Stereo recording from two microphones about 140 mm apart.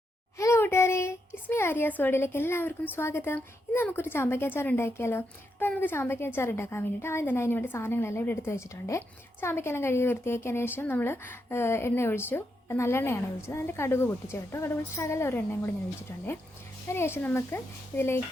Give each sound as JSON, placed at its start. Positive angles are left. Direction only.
{"t": 0.3, "sound": "a child's voice", "side_deg": 20}